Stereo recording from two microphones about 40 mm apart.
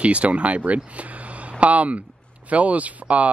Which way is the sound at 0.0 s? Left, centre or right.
Right.